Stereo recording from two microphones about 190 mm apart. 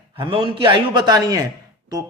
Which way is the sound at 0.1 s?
25° right (ahead or behind).